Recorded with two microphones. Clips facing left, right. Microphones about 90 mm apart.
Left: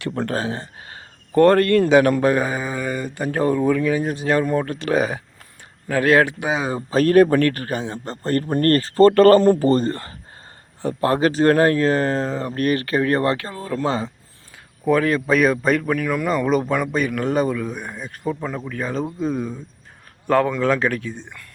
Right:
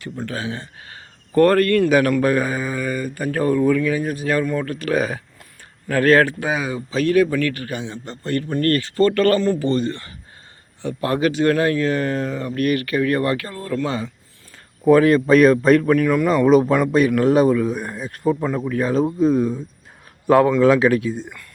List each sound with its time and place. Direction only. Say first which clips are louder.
0.0 s speech: left 5 dB; 70° left (ahead or behind)
0.3 s speech: left 3 dB; 35° left (ahead or behind); by 6.7 s 20° left (ahead or behind)
6.7 s a man's voice: left 2 dB; 40° left (ahead or behind)
13.5 s speech: right 1 dB; 15° left (ahead or behind)
13.7 s a man's voice: left 1 dB; 30° left (ahead or behind)
14.8 s speech: right 5 dB; 5° right (ahead or behind)